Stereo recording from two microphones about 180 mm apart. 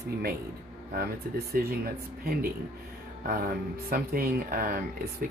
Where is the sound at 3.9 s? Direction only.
55° right (ahead or behind).